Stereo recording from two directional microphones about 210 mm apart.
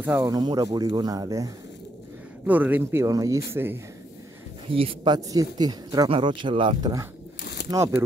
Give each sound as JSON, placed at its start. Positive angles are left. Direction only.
{"t": 0.0, "sound": "speech", "side_deg": -10}
{"t": 4.7, "sound": "speech", "side_deg": -25}